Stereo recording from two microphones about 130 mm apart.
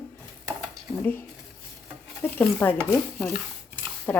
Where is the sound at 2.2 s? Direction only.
15° left (ahead or behind).